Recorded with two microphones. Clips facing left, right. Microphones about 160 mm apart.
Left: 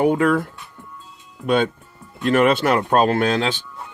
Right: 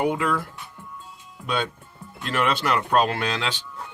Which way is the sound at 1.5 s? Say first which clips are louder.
Left 8 dB; 50° left (ahead or behind).